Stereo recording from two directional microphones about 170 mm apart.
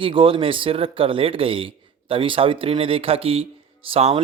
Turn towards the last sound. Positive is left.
turn(degrees=-35)  # may be behind; listen again after turning